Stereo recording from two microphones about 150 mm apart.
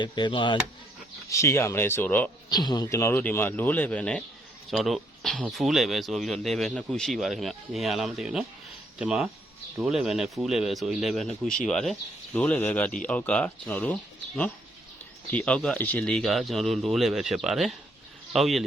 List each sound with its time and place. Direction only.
0.0 s speech: 30° left (ahead or behind)
1.3 s speech: 20° left (ahead or behind)
2.5 s speech: 30° left (ahead or behind); by 13.9 s 10° left (ahead or behind)
15.3 s speech: 10° left (ahead or behind)